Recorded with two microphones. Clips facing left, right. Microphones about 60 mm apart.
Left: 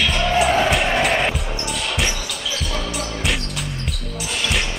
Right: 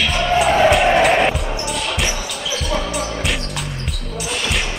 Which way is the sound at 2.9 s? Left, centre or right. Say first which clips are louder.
Right 2 dB; centre.